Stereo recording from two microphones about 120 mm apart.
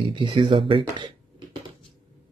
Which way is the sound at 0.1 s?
45° right (ahead or behind).